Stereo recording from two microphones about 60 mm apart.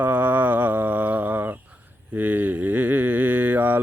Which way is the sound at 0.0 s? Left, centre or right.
Right.